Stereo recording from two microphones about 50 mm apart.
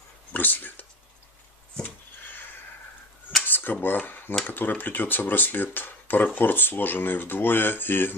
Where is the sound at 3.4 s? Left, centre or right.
Left.